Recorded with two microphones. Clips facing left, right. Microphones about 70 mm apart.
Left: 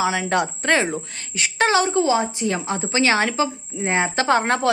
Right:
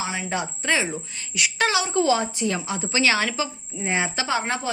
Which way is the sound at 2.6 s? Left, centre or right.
Left.